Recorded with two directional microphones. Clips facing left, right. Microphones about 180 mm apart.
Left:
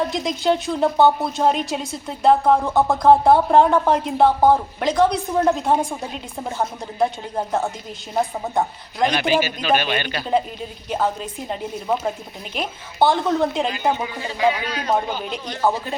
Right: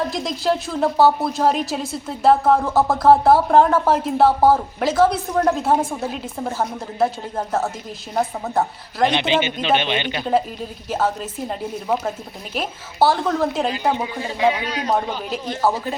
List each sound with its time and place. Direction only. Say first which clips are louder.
0.1 s a woman's voice: left 1 dB; centre (ahead or behind)
9.0 s speech: even; 25° right (ahead or behind)
10.8 s a woman's voice: right 1 dB; 5° right (ahead or behind)
13.9 s speech: right 2 dB; 25° right (ahead or behind)
14.8 s a woman's voice: even; centre (ahead or behind)